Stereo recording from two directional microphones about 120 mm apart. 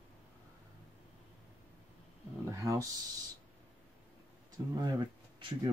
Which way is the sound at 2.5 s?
25° right (ahead or behind).